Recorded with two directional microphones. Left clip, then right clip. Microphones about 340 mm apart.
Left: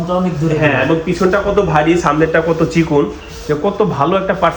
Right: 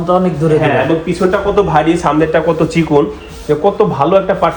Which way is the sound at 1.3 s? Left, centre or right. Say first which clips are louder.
Right 2 dB; centre.